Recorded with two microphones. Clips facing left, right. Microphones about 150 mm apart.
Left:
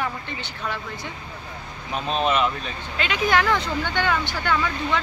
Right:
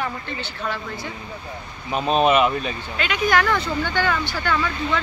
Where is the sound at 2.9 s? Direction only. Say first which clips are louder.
Right 1 dB; 25° left (ahead or behind).